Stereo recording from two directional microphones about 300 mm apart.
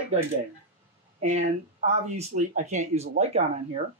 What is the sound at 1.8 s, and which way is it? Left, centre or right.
Speech, right.